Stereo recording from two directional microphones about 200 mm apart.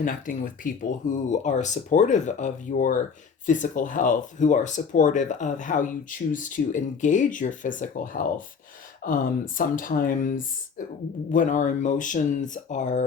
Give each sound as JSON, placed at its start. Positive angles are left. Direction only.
{"t": 0.0, "sound": "speech", "side_deg": 40}